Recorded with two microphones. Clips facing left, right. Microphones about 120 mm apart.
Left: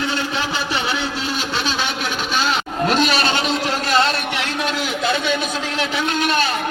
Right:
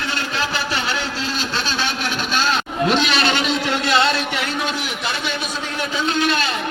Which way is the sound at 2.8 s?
40° left (ahead or behind).